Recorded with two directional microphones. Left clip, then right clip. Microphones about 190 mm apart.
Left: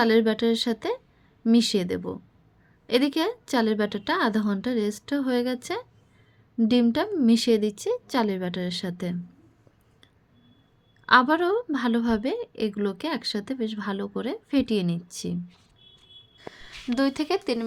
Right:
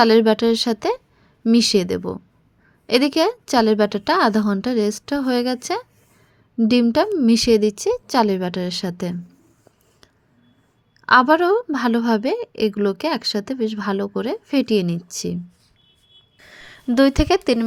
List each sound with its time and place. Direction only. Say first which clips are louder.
0.0 s a woman's voice: right 7 dB; 35° right (ahead or behind)
11.0 s a woman's voice: right 6 dB; 30° right (ahead or behind)
16.5 s speech: right 6 dB; 25° right (ahead or behind)